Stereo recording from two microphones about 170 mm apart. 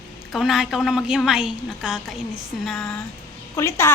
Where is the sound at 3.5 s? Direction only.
15° left (ahead or behind).